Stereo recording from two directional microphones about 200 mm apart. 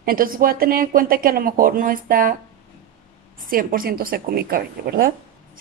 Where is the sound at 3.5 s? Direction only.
45° right (ahead or behind).